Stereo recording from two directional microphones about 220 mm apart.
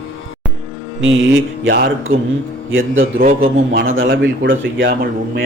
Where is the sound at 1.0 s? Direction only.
55° right (ahead or behind).